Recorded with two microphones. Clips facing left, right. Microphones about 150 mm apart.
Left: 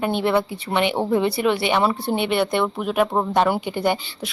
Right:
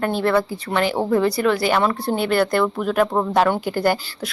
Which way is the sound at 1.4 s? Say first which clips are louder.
Right 1 dB; 5° left (ahead or behind).